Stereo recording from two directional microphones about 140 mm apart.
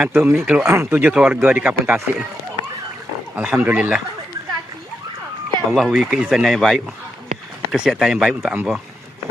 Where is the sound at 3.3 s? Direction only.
10° right (ahead or behind).